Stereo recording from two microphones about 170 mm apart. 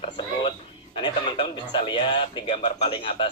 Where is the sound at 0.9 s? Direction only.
30° left (ahead or behind).